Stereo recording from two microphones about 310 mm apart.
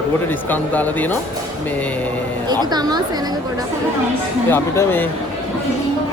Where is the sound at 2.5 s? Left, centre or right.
Centre.